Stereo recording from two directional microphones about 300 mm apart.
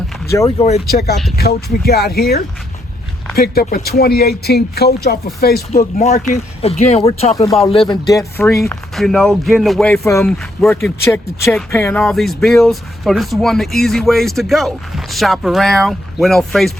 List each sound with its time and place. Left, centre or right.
0.3 s speech: centre
0.6 s speech: left
1.4 s speech: left; by 16.7 s centre